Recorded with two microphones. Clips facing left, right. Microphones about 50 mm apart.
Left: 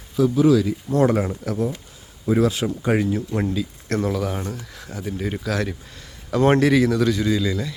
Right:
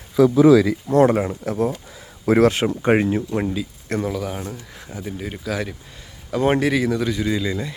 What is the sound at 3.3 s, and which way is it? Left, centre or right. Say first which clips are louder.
Speech: even; centre.